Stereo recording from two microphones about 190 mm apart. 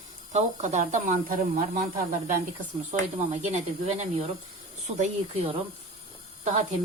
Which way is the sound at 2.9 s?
35° right (ahead or behind).